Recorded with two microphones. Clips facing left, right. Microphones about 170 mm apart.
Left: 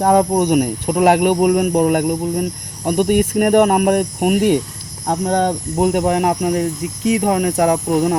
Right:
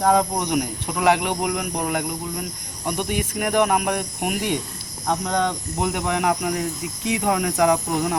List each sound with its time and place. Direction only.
0.0 s speech: 50° left (ahead or behind)